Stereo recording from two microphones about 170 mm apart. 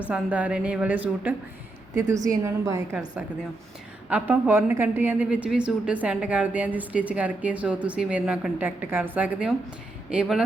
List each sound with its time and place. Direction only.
0.1 s a woman's voice: 10° right (ahead or behind)
4.1 s a woman's voice: 10° right (ahead or behind)